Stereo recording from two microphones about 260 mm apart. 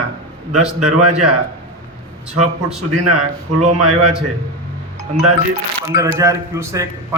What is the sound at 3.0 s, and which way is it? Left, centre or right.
Speech, right.